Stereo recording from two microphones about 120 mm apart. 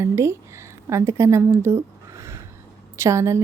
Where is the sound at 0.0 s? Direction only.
20° right (ahead or behind).